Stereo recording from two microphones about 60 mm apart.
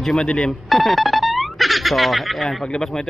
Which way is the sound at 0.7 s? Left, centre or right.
Centre.